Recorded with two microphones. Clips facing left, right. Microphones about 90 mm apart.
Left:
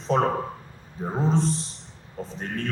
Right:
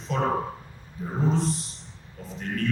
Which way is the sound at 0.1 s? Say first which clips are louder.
Left 5 dB; 35° left (ahead or behind).